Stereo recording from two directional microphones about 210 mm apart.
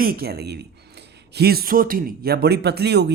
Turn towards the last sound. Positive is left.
turn(degrees=-50)  # may be behind; listen again after turning